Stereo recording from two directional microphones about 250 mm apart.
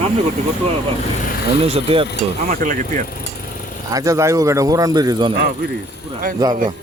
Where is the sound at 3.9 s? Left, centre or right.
Centre.